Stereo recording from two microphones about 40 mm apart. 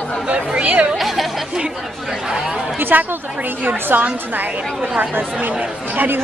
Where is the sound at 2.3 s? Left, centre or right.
Centre.